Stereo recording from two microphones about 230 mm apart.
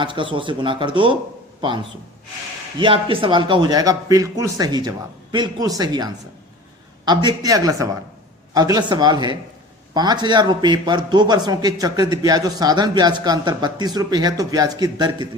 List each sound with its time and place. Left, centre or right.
0.0 s speech: right
2.7 s a man's voice: right